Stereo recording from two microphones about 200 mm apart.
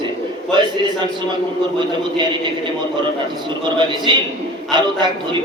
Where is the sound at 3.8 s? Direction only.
20° right (ahead or behind).